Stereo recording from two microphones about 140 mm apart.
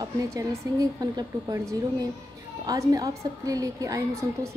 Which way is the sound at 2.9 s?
25° right (ahead or behind).